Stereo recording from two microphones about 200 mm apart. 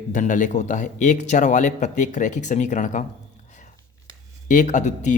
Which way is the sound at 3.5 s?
40° left (ahead or behind).